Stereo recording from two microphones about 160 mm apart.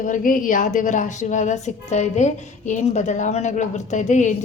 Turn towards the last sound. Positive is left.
turn(degrees=50)  # may be behind; listen again after turning